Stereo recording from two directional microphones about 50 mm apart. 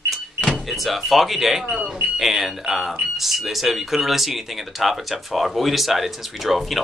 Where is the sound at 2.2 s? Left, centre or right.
Centre.